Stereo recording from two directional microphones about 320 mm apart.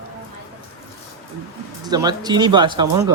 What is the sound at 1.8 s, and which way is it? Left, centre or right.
Speech, centre.